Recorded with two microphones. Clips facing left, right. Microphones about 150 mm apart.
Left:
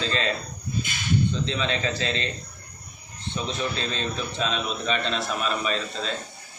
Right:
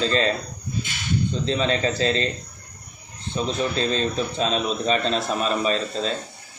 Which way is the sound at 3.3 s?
40° right (ahead or behind).